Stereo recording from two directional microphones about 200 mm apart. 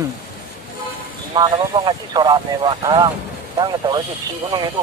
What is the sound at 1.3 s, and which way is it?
Speech, 20° right (ahead or behind).